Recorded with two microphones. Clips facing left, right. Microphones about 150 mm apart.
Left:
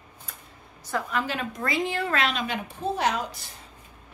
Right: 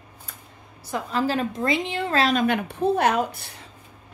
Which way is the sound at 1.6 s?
20° right (ahead or behind).